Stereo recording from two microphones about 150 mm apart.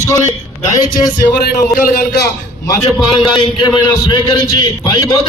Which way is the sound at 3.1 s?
35° left (ahead or behind).